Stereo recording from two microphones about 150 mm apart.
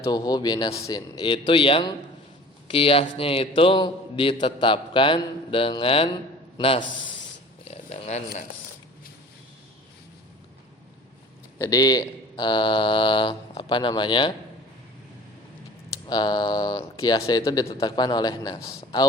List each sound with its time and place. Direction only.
0.0 s a man's voice: 25° left (ahead or behind)
7.6 s dog: 45° left (ahead or behind)
11.5 s a man's voice: 25° left (ahead or behind)
16.0 s speech: 30° left (ahead or behind)